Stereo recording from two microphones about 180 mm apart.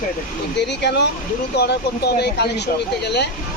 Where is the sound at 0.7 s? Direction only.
70° left (ahead or behind).